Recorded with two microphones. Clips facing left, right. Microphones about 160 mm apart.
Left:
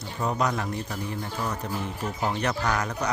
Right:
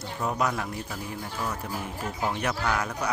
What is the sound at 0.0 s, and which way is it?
Speech, 5° right (ahead or behind).